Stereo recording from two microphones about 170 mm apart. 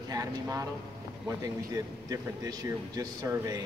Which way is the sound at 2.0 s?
20° right (ahead or behind).